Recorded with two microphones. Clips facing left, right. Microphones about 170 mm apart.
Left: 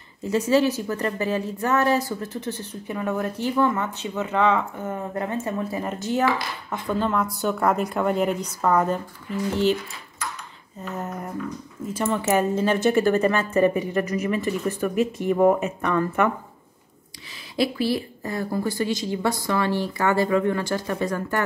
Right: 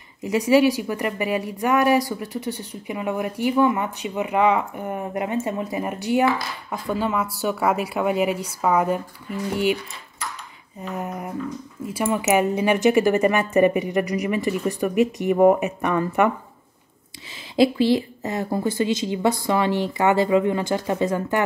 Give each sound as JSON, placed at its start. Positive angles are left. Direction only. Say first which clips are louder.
{"t": 0.2, "sound": "a woman's voice", "louder": "right 3 dB", "side_deg": -15}
{"t": 10.8, "sound": "a woman's voice", "louder": "right 2 dB", "side_deg": -10}
{"t": 17.6, "sound": "a woman's voice", "louder": "right 6 dB", "side_deg": -25}